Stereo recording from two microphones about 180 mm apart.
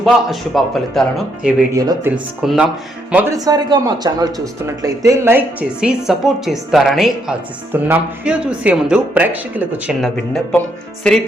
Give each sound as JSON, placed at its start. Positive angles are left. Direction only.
{"t": 0.0, "sound": "a man's voice", "side_deg": 0}
{"t": 3.3, "sound": "a man's voice", "side_deg": -20}